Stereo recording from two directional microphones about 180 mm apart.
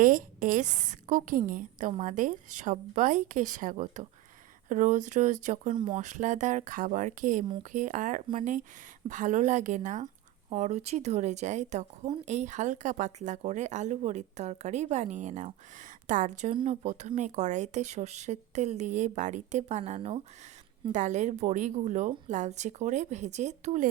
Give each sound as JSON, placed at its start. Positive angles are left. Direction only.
{"t": 0.0, "sound": "a woman's voice", "side_deg": -50}